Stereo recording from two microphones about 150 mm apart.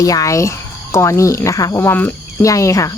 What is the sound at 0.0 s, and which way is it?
Speech, 20° left (ahead or behind).